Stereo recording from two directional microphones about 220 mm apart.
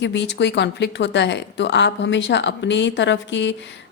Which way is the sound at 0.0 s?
55° left (ahead or behind).